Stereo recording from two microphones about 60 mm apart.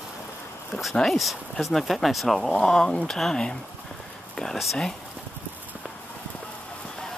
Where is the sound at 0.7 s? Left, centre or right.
Centre.